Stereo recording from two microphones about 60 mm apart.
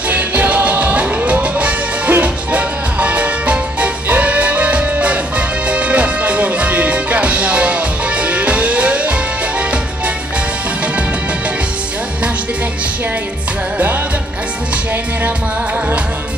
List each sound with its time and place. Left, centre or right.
0.1 s music: right